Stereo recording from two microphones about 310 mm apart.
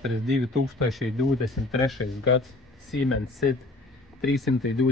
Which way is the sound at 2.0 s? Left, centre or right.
Left.